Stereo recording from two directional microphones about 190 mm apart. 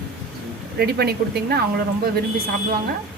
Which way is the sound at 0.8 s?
55° right (ahead or behind).